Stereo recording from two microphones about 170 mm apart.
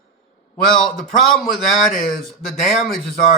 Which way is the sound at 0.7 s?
Centre (ahead or behind).